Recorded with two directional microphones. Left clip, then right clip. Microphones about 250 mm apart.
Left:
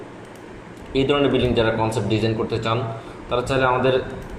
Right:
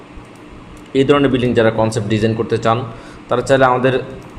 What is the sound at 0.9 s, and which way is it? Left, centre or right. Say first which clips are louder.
A man's voice: right 6 dB; right.